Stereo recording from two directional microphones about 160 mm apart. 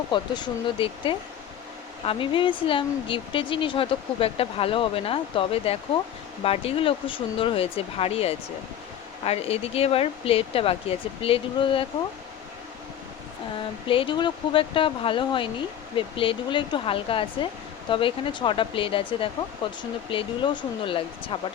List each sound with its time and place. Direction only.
0.1 s speech: 30° left (ahead or behind)
13.8 s speech: 35° left (ahead or behind)